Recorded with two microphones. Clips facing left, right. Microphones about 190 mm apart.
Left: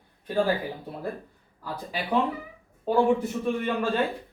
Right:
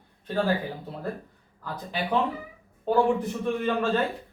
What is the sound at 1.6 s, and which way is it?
Mantra, 10° left (ahead or behind).